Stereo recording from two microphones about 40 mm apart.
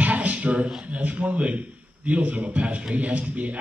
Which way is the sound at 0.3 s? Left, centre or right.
Right.